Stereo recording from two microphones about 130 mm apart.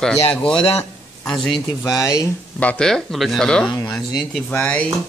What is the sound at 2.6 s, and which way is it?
Speech, 10° left (ahead or behind).